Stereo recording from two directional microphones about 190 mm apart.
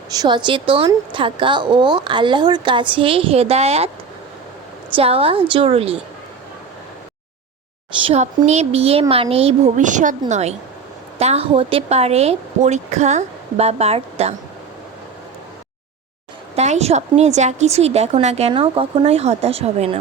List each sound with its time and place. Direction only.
0.1 s a woman's voice: 20° right (ahead or behind)
4.9 s a woman's voice: 30° right (ahead or behind)
8.0 s a woman's voice: 35° right (ahead or behind)
16.6 s a woman's voice: 35° right (ahead or behind)